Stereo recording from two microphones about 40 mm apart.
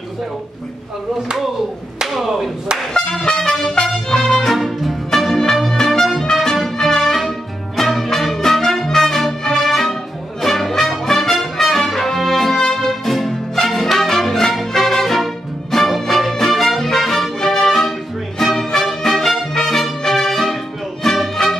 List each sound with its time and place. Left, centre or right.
2.0 s a sound: centre
2.9 s music: centre
3.3 s music: centre
11.1 s brass instrument: centre
17.4 s music: centre